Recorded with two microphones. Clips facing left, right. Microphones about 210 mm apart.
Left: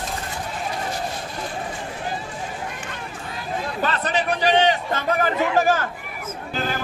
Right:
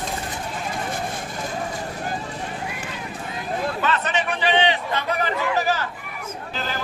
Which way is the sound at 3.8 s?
35° left (ahead or behind).